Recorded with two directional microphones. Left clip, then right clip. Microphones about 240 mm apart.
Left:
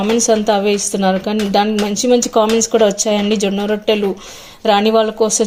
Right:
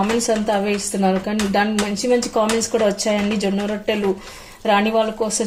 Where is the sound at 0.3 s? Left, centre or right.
Left.